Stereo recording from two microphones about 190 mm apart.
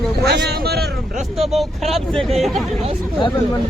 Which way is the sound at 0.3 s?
60° right (ahead or behind).